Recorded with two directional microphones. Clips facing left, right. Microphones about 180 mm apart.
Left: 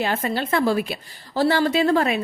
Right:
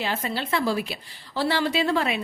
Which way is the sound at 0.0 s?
50° left (ahead or behind).